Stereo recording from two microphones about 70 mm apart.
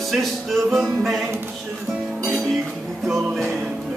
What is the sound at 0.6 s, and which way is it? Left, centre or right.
Music, centre.